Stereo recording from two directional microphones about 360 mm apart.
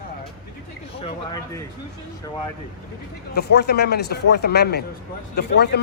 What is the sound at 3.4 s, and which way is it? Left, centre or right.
Speech, left.